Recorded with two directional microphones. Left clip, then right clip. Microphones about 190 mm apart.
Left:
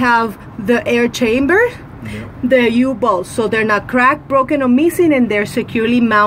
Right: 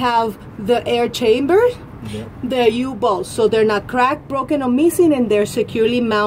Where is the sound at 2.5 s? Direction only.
45° left (ahead or behind).